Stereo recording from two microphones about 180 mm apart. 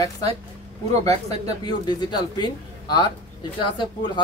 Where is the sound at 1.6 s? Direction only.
25° left (ahead or behind).